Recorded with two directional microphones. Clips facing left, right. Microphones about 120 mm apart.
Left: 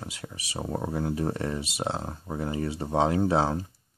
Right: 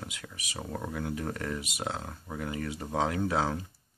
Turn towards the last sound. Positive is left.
turn(degrees=30)  # may be behind; listen again after turning